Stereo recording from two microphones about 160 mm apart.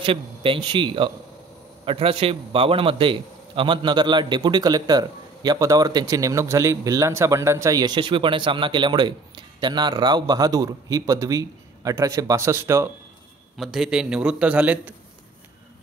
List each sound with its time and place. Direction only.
0.0 s a man's voice: 35° right (ahead or behind); by 12.9 s 15° right (ahead or behind)
13.6 s a man's voice: 5° right (ahead or behind)